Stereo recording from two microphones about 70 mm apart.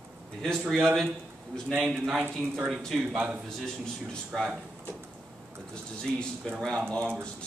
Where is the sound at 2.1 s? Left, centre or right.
Right.